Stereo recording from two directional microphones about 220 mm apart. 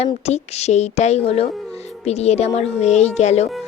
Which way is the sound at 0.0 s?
30° left (ahead or behind).